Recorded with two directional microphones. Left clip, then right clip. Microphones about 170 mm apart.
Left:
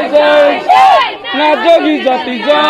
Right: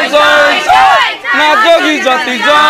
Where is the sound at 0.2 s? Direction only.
25° right (ahead or behind).